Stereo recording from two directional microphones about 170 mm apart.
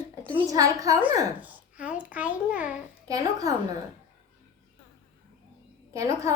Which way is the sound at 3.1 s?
20° right (ahead or behind).